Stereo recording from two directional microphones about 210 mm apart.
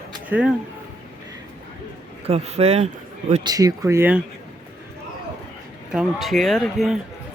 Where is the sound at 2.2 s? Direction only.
30° right (ahead or behind).